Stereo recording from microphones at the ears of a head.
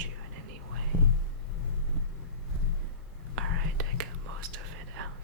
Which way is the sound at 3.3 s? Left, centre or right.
Right.